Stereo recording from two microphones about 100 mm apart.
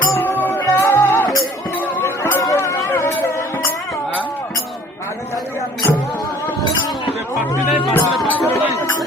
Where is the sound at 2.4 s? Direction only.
30° left (ahead or behind).